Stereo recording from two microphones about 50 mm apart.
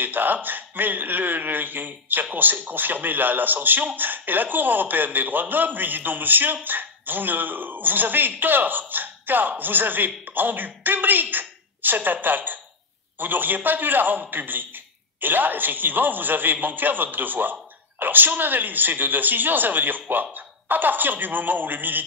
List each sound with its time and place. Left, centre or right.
0.0 s a man's voice: right